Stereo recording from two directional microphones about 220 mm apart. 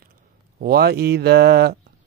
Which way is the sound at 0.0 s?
45° right (ahead or behind).